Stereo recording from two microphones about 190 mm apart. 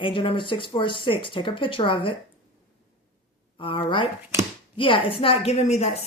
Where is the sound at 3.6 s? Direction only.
25° left (ahead or behind).